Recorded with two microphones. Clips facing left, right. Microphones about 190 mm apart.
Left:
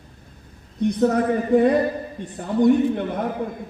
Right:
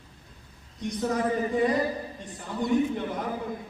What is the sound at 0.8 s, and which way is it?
A man's voice, 60° left (ahead or behind).